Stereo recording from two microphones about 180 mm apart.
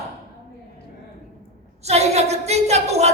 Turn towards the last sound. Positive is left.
turn(degrees=-35)  # may be behind; listen again after turning